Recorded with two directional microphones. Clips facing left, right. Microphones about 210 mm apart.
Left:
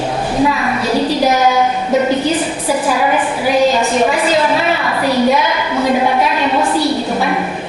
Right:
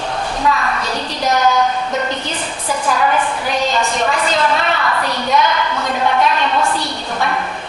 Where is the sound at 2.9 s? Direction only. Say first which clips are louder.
Right 2 dB; 10° left (ahead or behind).